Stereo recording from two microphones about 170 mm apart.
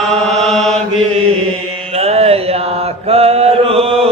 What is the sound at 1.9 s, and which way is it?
Mantra, 40° right (ahead or behind).